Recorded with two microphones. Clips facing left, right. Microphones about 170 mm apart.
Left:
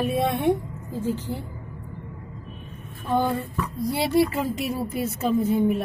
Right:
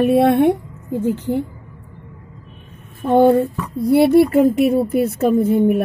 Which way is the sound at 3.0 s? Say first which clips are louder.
Right 12 dB; 60° right (ahead or behind).